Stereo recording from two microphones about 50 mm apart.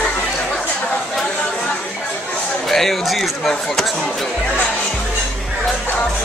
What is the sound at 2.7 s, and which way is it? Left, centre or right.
Speech, centre.